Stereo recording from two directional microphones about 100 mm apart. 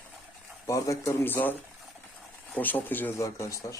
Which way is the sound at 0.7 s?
35° left (ahead or behind).